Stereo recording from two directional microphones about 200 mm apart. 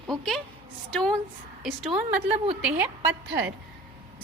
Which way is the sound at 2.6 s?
5° right (ahead or behind).